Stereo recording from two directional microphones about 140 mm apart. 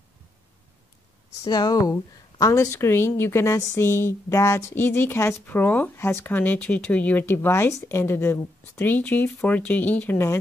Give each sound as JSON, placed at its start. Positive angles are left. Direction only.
{"t": 1.4, "sound": "a woman's voice", "side_deg": 30}